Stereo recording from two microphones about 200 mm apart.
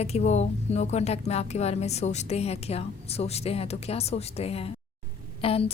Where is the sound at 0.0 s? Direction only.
35° left (ahead or behind).